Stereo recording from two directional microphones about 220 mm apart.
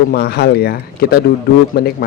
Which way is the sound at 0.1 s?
45° left (ahead or behind).